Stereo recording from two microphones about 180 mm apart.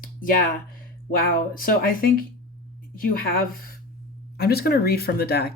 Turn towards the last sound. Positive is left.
turn(degrees=60)  # may be behind; listen again after turning